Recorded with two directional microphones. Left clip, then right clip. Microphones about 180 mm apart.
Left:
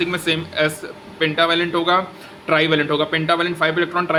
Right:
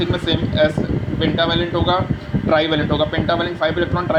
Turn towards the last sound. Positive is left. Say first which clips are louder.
# even
turn(degrees=15)  # may be behind; listen again after turning